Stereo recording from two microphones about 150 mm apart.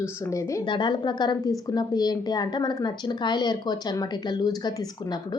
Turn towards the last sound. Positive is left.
turn(degrees=25)  # may be behind; listen again after turning